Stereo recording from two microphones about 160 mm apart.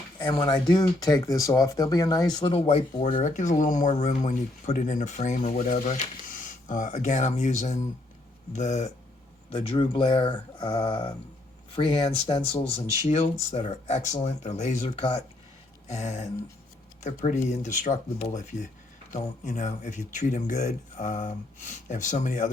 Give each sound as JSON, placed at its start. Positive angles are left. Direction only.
{"t": 0.2, "sound": "speech", "side_deg": 30}
{"t": 9.5, "sound": "speech", "side_deg": 35}